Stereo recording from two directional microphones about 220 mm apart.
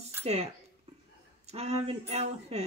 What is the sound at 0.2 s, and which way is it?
Speech, 30° right (ahead or behind).